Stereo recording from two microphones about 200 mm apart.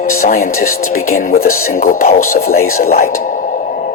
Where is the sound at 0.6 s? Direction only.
45° left (ahead or behind).